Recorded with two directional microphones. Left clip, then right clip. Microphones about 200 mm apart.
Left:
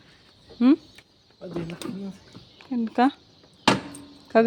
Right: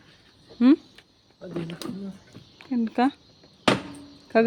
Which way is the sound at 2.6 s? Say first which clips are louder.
Left 2 dB; 5° right (ahead or behind).